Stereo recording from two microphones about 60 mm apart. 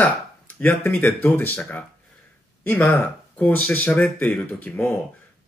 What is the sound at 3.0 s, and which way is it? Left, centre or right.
Speech, left.